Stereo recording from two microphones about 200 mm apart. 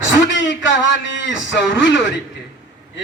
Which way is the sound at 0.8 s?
65° left (ahead or behind).